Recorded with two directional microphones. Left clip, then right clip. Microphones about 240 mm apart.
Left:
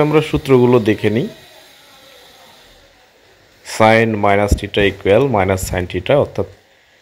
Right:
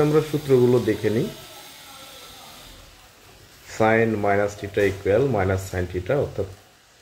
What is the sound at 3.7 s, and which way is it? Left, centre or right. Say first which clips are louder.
Speech: left 8 dB; left.